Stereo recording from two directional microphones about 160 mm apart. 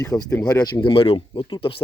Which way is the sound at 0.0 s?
20° left (ahead or behind).